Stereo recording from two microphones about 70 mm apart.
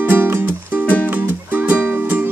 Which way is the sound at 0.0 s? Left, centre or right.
Right.